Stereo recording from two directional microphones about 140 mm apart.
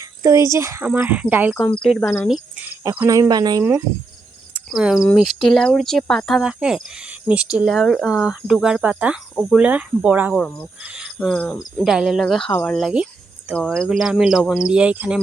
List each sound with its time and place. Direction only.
0.0 s speech: 25° right (ahead or behind)
1.8 s speech: 5° left (ahead or behind)
2.2 s speech: 10° right (ahead or behind)
3.1 s speech: 25° right (ahead or behind)
3.6 s speech: 20° right (ahead or behind)
4.7 s speech: 5° right (ahead or behind)
10.8 s cricket: 5° right (ahead or behind)
11.2 s cricket: 10° left (ahead or behind)
11.6 s speech: 5° right (ahead or behind)